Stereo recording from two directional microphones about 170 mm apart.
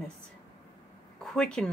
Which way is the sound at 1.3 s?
5° left (ahead or behind).